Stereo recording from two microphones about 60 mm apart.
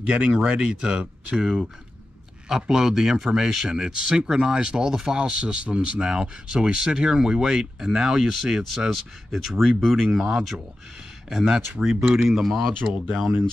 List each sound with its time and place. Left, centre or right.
0.1 s speech: centre